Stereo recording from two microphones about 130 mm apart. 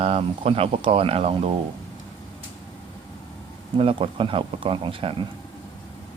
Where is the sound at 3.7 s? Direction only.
45° right (ahead or behind).